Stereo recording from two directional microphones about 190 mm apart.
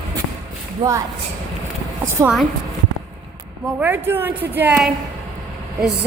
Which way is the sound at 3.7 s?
10° right (ahead or behind).